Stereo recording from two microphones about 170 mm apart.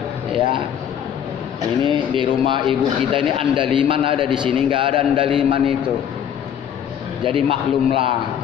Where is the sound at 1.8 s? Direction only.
30° right (ahead or behind).